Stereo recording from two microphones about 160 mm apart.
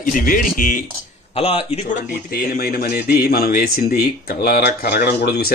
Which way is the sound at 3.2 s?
65° left (ahead or behind).